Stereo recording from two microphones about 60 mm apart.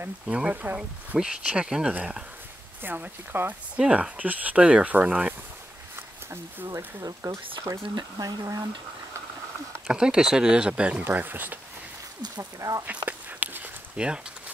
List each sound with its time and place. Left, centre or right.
0.3 s speech: right
0.7 s speech: centre
2.8 s speech: right
3.8 s speech: centre
4.2 s speech: right
7.0 s speech: right
8.2 s speech: right
9.8 s speech: centre
11.1 s speech: right
12.4 s speech: right
12.8 s a sound: right
13.9 s speech: centre